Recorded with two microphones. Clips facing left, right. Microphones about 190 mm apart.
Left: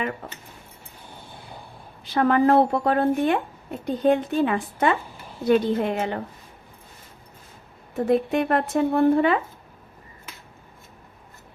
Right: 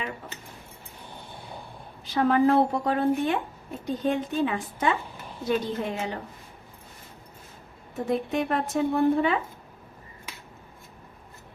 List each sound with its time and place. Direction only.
2.1 s a woman's voice: 60° left (ahead or behind)
8.0 s a woman's voice: 60° left (ahead or behind)